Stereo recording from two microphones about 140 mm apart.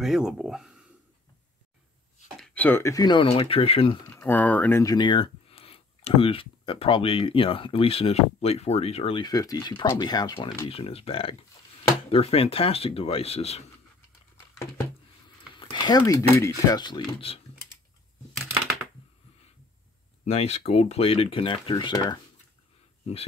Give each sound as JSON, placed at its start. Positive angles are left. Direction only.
{"t": 0.0, "sound": "speech", "side_deg": -5}
{"t": 2.4, "sound": "speech", "side_deg": 10}
{"t": 3.3, "sound": "speech", "side_deg": 40}
{"t": 4.1, "sound": "speech", "side_deg": 15}
{"t": 4.8, "sound": "speech", "side_deg": 30}
{"t": 10.7, "sound": "speech", "side_deg": 45}
{"t": 15.5, "sound": "speech", "side_deg": 35}
{"t": 20.2, "sound": "speech", "side_deg": 50}